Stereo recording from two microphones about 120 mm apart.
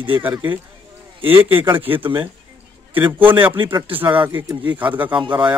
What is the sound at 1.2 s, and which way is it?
Speech, 45° right (ahead or behind).